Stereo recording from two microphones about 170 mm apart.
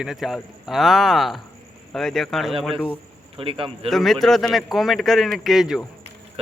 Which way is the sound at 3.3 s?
30° right (ahead or behind).